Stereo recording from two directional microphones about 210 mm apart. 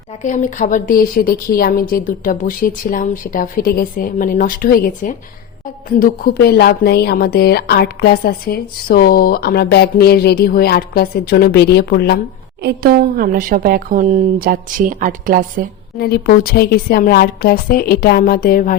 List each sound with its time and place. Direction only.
0.2 s a woman's voice: 35° left (ahead or behind)
12.6 s speech: 45° right (ahead or behind)
16.0 s a woman's voice: 45° left (ahead or behind)